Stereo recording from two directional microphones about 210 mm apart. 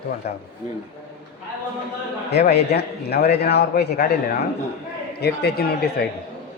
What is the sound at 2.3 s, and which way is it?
A man's voice, 50° left (ahead or behind).